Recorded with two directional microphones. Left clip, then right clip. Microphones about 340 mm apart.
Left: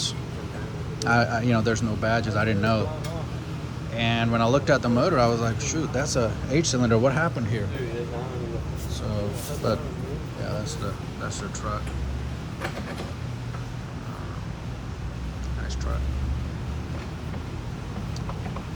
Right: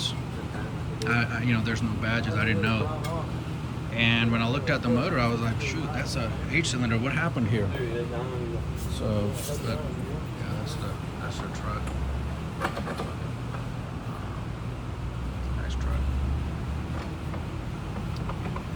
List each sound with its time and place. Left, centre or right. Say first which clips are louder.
1.0 s speech: left 5 dB; centre
3.9 s speech: even; centre